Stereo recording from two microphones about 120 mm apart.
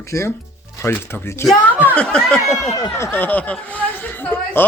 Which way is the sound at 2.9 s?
20° left (ahead or behind).